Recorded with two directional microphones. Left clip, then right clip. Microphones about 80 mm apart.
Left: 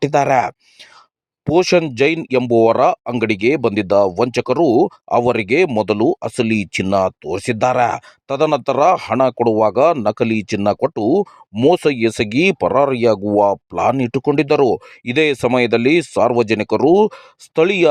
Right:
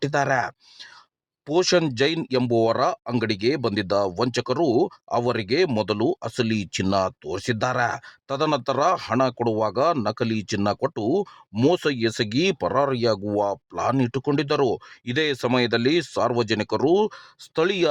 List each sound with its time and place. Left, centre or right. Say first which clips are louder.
0.0 s speech: left 8 dB; left
1.5 s speech: left 6 dB; left
2.5 s speech: left 9 dB; left